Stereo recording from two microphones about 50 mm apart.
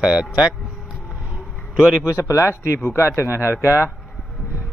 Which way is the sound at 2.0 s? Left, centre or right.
Left.